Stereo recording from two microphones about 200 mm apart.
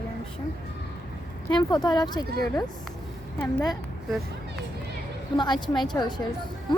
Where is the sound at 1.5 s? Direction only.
20° left (ahead or behind).